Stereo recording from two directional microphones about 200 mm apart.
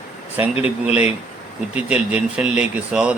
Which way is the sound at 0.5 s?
30° left (ahead or behind).